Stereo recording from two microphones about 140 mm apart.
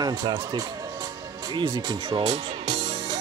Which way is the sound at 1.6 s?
30° right (ahead or behind).